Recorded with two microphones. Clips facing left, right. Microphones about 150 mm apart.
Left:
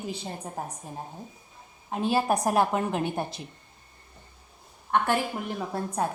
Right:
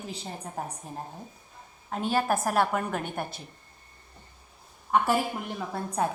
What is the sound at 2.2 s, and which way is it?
Speech, 20° left (ahead or behind).